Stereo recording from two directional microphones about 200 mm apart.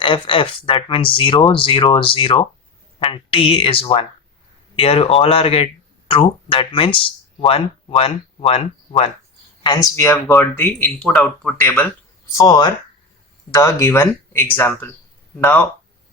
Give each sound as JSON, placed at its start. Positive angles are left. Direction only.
{"t": 0.0, "sound": "speech", "side_deg": 25}
{"t": 9.6, "sound": "speech", "side_deg": 15}
{"t": 12.4, "sound": "speech", "side_deg": 20}